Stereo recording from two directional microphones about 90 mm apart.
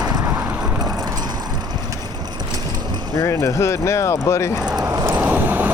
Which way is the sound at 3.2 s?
35° left (ahead or behind).